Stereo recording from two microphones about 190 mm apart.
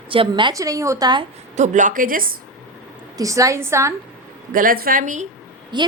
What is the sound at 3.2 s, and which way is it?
Speech, 15° right (ahead or behind).